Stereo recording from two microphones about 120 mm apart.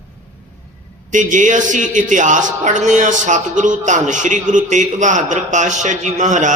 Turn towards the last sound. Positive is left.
turn(degrees=-90)